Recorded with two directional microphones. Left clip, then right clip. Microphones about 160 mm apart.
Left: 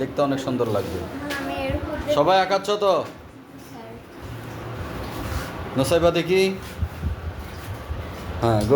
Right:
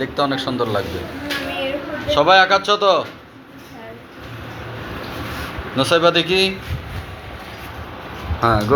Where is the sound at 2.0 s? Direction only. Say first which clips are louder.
Right 6 dB; 10° left (ahead or behind).